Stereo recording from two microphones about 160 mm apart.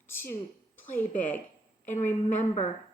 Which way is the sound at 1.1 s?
55° left (ahead or behind).